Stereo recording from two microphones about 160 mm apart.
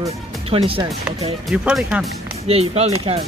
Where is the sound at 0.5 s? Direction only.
35° right (ahead or behind).